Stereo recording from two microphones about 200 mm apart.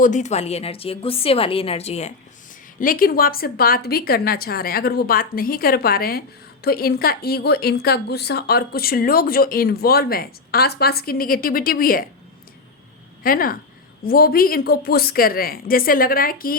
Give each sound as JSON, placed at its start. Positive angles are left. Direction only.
{"t": 0.0, "sound": "a woman's voice", "side_deg": 35}
{"t": 2.8, "sound": "a woman's voice", "side_deg": 45}
{"t": 13.2, "sound": "a woman's voice", "side_deg": 45}